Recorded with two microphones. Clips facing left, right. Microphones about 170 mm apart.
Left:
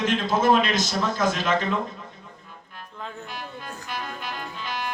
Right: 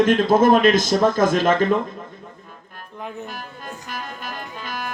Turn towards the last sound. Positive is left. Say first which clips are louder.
# right 1 dB
turn(degrees=-50)  # may be behind; listen again after turning